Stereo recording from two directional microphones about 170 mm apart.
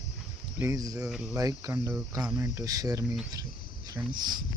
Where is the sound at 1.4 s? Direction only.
20° right (ahead or behind).